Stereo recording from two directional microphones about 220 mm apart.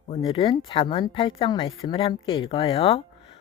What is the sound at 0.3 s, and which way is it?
Speech, 25° left (ahead or behind).